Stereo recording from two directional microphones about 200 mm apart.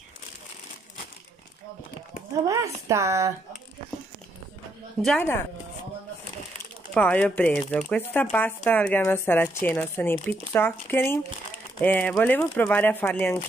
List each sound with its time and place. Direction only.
2.4 s speech: 15° right (ahead or behind)
5.0 s speech: 10° left (ahead or behind)
6.9 s speech: 5° left (ahead or behind)